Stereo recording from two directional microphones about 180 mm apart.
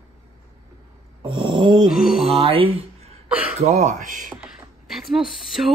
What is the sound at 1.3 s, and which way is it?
Speech, 25° right (ahead or behind).